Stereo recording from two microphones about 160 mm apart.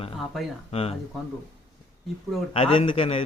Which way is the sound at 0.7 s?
40° left (ahead or behind).